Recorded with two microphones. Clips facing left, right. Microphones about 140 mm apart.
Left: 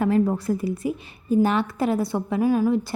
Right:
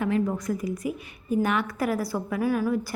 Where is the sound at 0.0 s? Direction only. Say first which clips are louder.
Left 5 dB; 35° left (ahead or behind).